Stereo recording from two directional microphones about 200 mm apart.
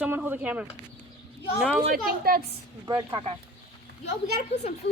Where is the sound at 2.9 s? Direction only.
15° right (ahead or behind).